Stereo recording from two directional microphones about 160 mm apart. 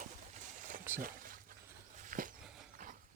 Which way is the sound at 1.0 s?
60° right (ahead or behind).